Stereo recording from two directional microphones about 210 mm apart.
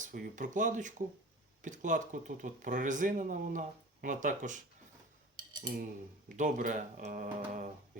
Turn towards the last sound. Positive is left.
turn(degrees=-40)  # may be behind; listen again after turning